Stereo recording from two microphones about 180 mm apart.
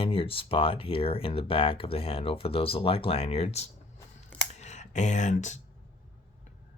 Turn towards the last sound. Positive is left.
turn(degrees=40)  # may be behind; listen again after turning